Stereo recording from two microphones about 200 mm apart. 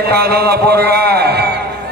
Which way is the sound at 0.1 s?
50° right (ahead or behind).